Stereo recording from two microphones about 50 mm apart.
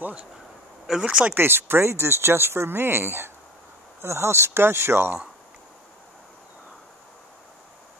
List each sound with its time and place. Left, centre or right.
0.8 s speech: centre
1.3 s speech: right
4.0 s speech: right